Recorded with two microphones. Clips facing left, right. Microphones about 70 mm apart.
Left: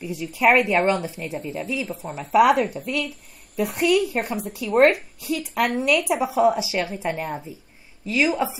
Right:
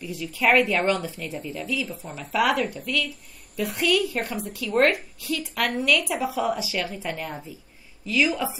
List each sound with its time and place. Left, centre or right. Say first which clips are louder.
0.0 s a woman's voice: left 4 dB; left